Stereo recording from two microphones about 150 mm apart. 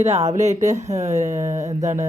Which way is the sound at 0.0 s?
45° right (ahead or behind).